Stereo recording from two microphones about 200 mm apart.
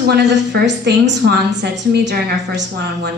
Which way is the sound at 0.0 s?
55° right (ahead or behind).